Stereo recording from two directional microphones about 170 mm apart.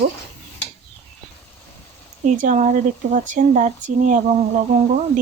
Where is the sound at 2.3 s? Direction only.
50° right (ahead or behind).